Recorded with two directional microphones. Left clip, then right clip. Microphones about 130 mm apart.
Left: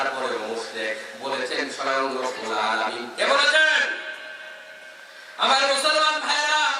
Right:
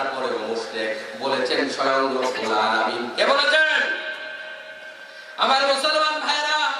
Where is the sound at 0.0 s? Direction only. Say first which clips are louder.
Right 1 dB; 15° right (ahead or behind).